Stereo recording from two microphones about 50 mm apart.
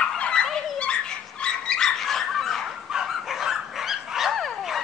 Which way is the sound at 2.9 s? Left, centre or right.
Centre.